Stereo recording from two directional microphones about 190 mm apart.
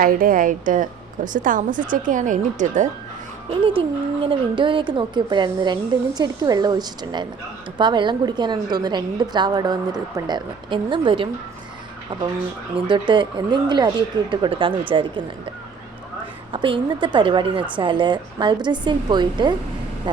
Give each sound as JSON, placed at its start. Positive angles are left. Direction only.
{"t": 0.0, "sound": "a woman's voice", "side_deg": -50}
{"t": 3.6, "sound": "speech", "side_deg": -25}
{"t": 12.9, "sound": "speech", "side_deg": -25}
{"t": 16.5, "sound": "speech", "side_deg": -25}